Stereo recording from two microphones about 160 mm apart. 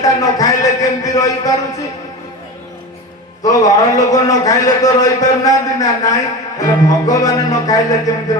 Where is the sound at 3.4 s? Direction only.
20° left (ahead or behind).